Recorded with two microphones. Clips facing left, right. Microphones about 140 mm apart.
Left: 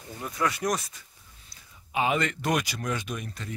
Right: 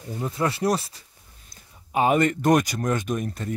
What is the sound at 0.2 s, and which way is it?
Speech, 30° right (ahead or behind).